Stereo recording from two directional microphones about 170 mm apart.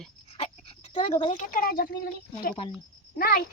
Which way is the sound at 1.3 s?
55° left (ahead or behind).